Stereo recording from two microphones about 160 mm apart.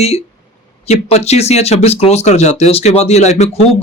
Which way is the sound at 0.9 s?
40° left (ahead or behind).